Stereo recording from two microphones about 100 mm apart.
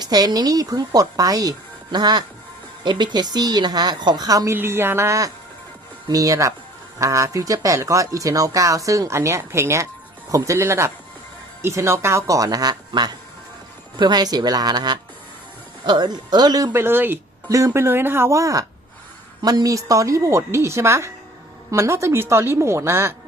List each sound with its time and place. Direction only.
0.0 s a woman's voice: 40° right (ahead or behind)
4.5 s a woman's voice: 25° right (ahead or behind); by 16.7 s 40° right (ahead or behind)
16.7 s speech: 20° right (ahead or behind)